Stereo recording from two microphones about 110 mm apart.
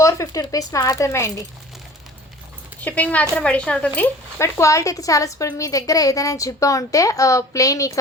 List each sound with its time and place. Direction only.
0.0 s speech: 30° left (ahead or behind)
2.8 s speech: 15° left (ahead or behind)
4.4 s a woman's voice: 25° left (ahead or behind)